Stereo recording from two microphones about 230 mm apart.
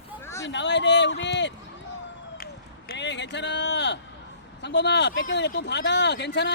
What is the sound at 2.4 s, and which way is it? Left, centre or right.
Run, left.